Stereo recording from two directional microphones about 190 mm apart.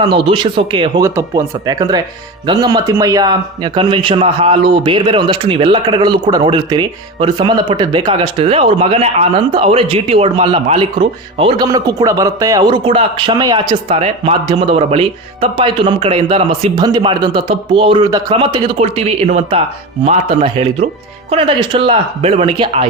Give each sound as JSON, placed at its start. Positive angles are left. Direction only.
{"t": 0.0, "sound": "a man's voice", "side_deg": -25}
{"t": 13.8, "sound": "a man's voice", "side_deg": -35}